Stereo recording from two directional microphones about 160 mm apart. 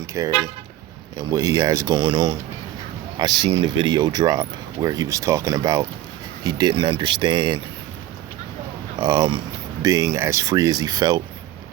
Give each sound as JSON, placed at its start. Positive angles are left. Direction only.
{"t": 0.2, "sound": "speech", "side_deg": -20}
{"t": 9.0, "sound": "speech", "side_deg": -25}